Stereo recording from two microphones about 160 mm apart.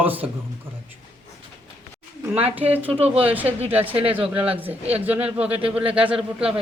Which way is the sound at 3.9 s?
35° right (ahead or behind).